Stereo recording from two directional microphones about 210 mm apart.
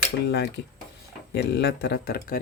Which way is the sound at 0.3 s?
55° left (ahead or behind).